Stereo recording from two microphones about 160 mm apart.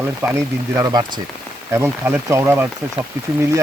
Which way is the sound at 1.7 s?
15° right (ahead or behind).